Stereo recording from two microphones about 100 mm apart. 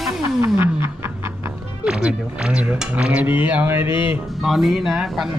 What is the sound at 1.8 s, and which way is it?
Speech, 10° right (ahead or behind).